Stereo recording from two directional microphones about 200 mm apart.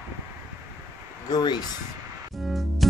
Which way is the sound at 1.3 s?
20° left (ahead or behind).